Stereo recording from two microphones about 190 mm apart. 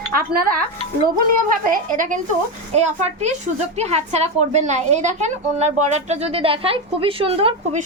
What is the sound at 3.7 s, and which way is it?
A woman's voice, 35° right (ahead or behind).